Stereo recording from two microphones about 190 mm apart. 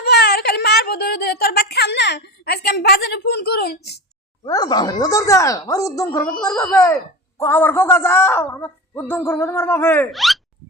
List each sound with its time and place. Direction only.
0.0 s a sound: 60° left (ahead or behind)
4.4 s speech: 20° left (ahead or behind)
10.1 s speech: centre (ahead or behind)